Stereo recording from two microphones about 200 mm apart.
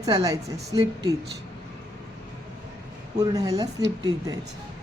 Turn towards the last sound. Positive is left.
turn(degrees=-20)  # may be behind; listen again after turning